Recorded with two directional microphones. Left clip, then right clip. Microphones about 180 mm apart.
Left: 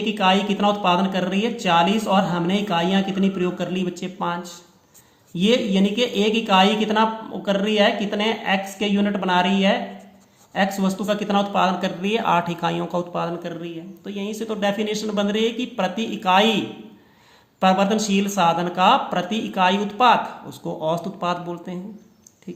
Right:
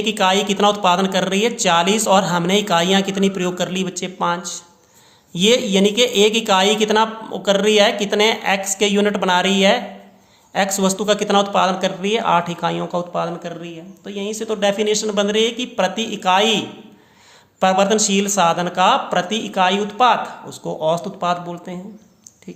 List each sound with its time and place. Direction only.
0.0 s speech: 25° right (ahead or behind); by 21.8 s 5° right (ahead or behind)